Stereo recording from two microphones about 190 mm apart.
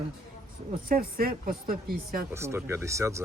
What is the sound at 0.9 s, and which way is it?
Speech, 50° right (ahead or behind).